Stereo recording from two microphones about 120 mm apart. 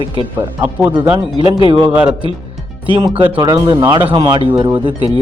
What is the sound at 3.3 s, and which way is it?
Speech, 40° right (ahead or behind).